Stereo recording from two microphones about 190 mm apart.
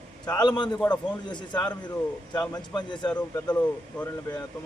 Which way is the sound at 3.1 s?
5° left (ahead or behind).